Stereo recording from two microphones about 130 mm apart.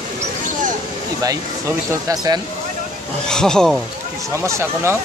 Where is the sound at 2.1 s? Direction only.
30° right (ahead or behind).